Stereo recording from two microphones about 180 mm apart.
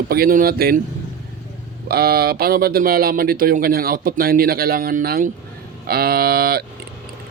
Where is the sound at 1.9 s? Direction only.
60° right (ahead or behind).